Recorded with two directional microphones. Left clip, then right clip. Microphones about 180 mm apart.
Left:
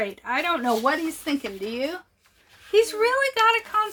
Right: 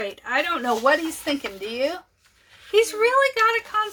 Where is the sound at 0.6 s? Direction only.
5° left (ahead or behind).